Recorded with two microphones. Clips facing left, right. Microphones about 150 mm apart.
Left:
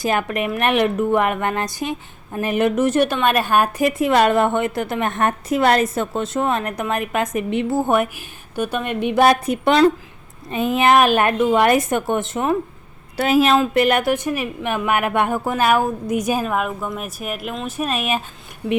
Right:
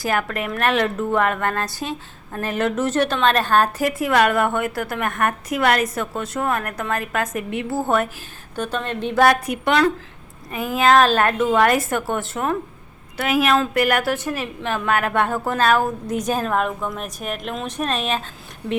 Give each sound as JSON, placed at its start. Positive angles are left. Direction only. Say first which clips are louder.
{"t": 0.0, "sound": "a woman's voice", "louder": "left 2 dB", "side_deg": 20}